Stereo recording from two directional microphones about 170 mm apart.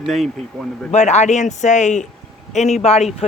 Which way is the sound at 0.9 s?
40° left (ahead or behind).